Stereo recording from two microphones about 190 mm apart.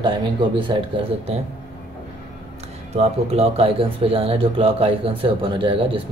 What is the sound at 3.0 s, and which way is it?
Speech, 30° right (ahead or behind).